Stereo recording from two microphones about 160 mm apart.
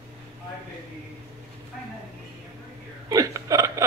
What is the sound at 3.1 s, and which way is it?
Hiccup, 20° right (ahead or behind).